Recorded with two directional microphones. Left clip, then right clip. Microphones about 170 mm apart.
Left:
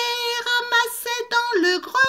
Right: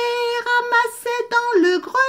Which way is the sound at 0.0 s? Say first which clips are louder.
Right 3 dB; 40° right (ahead or behind).